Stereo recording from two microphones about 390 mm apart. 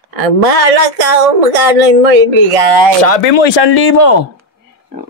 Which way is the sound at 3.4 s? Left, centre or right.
Left.